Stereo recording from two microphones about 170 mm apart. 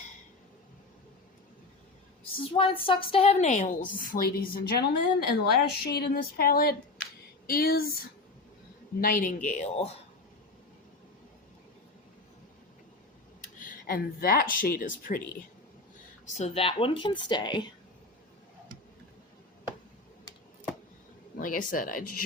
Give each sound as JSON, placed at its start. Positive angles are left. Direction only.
{"t": 2.4, "sound": "a woman's voice", "side_deg": 30}
{"t": 9.6, "sound": "speech", "side_deg": 40}
{"t": 13.4, "sound": "speech", "side_deg": 55}
{"t": 16.4, "sound": "a woman's voice", "side_deg": 35}
{"t": 21.3, "sound": "speech", "side_deg": 55}